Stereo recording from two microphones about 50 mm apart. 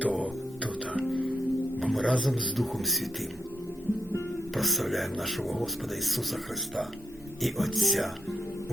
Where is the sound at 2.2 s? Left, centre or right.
Centre.